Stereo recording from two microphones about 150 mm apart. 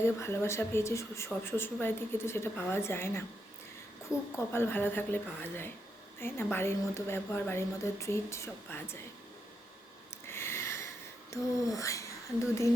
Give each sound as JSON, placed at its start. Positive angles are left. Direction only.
{"t": 0.0, "sound": "a woman's voice", "side_deg": 15}
{"t": 4.4, "sound": "a woman's voice", "side_deg": 15}
{"t": 10.1, "sound": "a sound", "side_deg": 15}
{"t": 11.3, "sound": "speech", "side_deg": 20}